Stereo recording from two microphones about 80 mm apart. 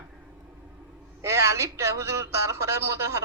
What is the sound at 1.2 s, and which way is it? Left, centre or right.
Speech, right.